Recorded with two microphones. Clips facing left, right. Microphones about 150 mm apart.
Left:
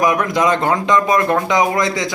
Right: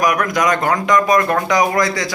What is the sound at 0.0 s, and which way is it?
Speech, 25° left (ahead or behind).